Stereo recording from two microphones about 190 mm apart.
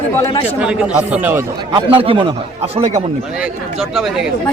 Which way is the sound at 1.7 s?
30° right (ahead or behind).